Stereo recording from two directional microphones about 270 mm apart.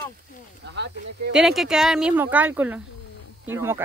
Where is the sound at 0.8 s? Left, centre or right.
Right.